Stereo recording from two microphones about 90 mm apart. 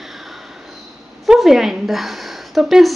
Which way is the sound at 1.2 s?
5° right (ahead or behind).